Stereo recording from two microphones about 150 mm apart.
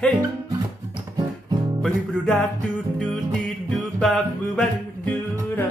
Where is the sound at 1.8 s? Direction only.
Centre (ahead or behind).